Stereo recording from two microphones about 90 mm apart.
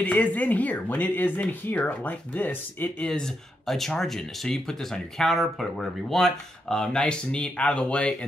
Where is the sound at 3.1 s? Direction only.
5° left (ahead or behind).